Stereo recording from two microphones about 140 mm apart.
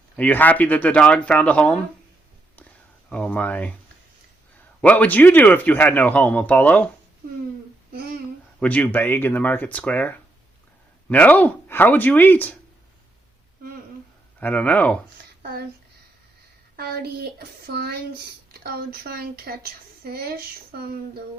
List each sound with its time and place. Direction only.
0.2 s speech: 10° left (ahead or behind)
3.1 s speech: 10° left (ahead or behind)
4.8 s speech: 10° left (ahead or behind)
8.5 s speech: 10° left (ahead or behind)
14.3 s speech: 10° left (ahead or behind)
18.5 s a woman's voice: 90° right